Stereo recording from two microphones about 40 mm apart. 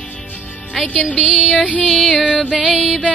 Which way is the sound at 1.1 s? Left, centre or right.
Centre.